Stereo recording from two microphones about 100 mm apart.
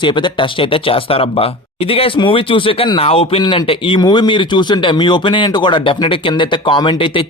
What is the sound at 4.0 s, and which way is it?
Speech, 45° left (ahead or behind).